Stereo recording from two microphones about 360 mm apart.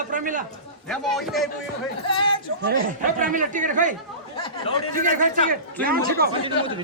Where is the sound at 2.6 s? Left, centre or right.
Right.